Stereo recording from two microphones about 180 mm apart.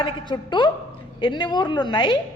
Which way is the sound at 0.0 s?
25° left (ahead or behind).